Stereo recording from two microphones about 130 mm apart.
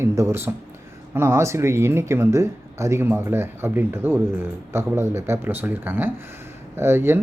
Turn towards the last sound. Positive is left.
turn(degrees=-20)  # may be behind; listen again after turning